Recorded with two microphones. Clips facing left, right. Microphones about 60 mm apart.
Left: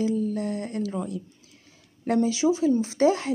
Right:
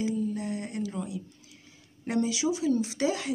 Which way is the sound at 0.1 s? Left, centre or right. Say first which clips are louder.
Left 4 dB; left.